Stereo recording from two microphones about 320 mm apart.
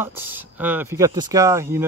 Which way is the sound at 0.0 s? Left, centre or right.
Centre.